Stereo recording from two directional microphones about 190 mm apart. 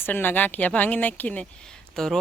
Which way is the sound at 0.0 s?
10° left (ahead or behind).